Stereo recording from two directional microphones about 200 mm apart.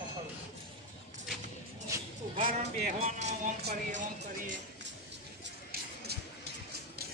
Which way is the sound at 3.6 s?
55° right (ahead or behind).